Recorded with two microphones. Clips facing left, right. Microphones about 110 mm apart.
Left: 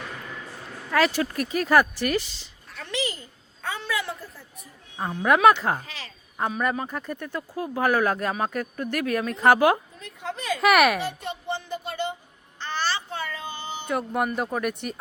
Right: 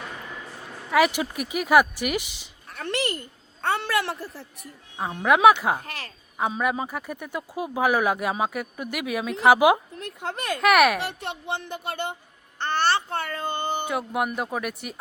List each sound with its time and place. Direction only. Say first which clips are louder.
0.9 s speech: right 1 dB; 15° right (ahead or behind)
2.6 s a woman's voice: right 3 dB; 55° right (ahead or behind); by 4.7 s 75° right (ahead or behind)
5.0 s speech: right 1 dB; 5° right (ahead or behind)
5.8 s speech: right 3 dB; 55° right (ahead or behind)
6.6 s speech: right 1 dB; 10° right (ahead or behind)
10.0 s speech: right 2 dB; 65° right (ahead or behind)
10.6 s speech: right 1 dB; centre (ahead or behind)
11.0 s speech: left 1 dB; 65° right (ahead or behind)
12.5 s babbling: right 5 dB; 60° right (ahead or behind)
13.8 s speech: even; 5° right (ahead or behind)